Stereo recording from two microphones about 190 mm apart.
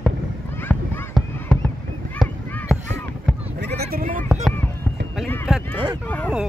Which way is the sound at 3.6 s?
55° right (ahead or behind).